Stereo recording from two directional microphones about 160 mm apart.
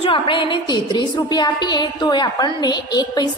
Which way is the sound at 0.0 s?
30° left (ahead or behind).